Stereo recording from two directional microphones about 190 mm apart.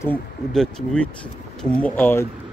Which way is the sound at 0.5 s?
5° left (ahead or behind).